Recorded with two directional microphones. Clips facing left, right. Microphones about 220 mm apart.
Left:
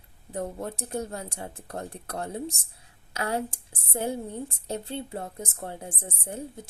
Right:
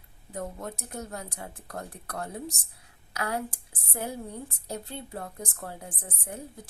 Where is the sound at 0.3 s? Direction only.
30° left (ahead or behind).